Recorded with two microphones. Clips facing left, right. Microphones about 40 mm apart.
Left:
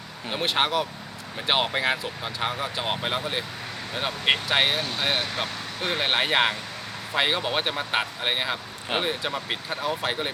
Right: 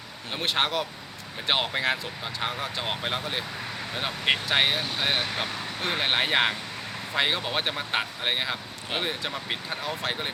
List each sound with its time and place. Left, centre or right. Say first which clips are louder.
0.4 s speech: left 2 dB; centre